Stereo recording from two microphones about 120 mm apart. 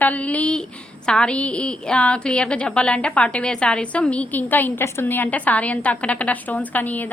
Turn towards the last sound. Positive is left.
turn(degrees=15)  # may be behind; listen again after turning